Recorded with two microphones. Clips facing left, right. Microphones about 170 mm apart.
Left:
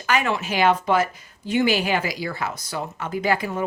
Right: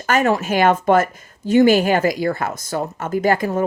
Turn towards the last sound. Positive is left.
turn(degrees=-45)  # may be behind; listen again after turning